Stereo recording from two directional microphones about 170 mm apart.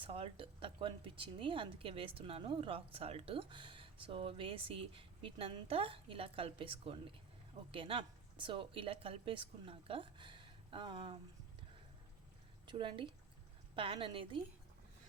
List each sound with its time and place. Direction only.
0.0 s speech: 30° right (ahead or behind)
12.6 s speech: 25° right (ahead or behind)